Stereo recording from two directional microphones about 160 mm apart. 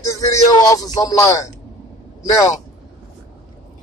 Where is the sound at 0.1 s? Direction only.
20° left (ahead or behind).